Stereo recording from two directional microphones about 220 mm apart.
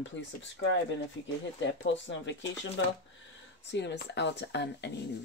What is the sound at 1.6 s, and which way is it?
Speech, 55° left (ahead or behind).